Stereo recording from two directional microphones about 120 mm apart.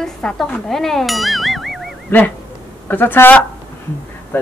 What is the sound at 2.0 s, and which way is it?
A man's voice, 15° left (ahead or behind).